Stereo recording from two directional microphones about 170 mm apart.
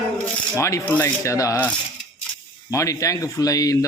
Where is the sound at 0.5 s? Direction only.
20° left (ahead or behind).